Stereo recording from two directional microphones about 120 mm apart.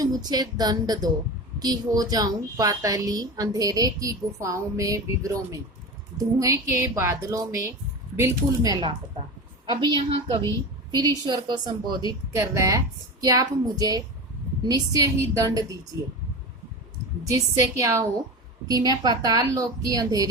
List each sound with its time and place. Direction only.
0.0 s a woman's voice: 35° right (ahead or behind)
9.6 s a woman's voice: 40° right (ahead or behind)
12.3 s a woman's voice: 25° right (ahead or behind)
17.3 s a woman's voice: 25° right (ahead or behind)